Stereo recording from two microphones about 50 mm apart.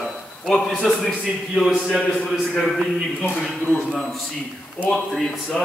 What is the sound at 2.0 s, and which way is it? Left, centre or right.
Speech, centre.